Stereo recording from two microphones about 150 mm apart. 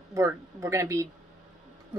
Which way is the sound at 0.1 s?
20° right (ahead or behind).